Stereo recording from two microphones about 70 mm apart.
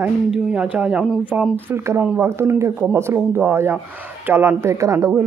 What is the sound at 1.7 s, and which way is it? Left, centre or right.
Speech, right.